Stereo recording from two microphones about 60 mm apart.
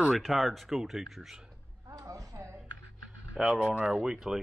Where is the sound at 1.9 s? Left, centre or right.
Right.